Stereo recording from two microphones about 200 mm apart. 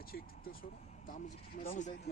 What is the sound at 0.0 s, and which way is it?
Speech, 45° left (ahead or behind).